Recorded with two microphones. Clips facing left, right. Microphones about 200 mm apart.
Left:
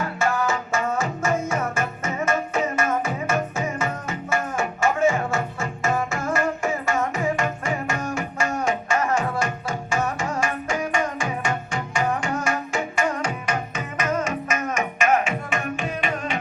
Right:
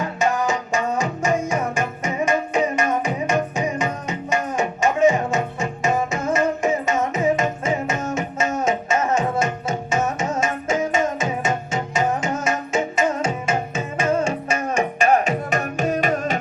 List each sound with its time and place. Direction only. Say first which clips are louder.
0.0 s music: right 2 dB; 20° right (ahead or behind); by 16.4 s 40° right (ahead or behind)